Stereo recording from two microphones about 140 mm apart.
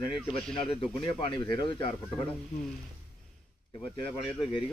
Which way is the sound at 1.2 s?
35° left (ahead or behind).